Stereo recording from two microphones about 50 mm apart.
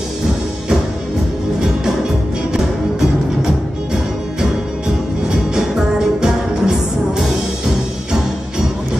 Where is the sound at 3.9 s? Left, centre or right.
Centre.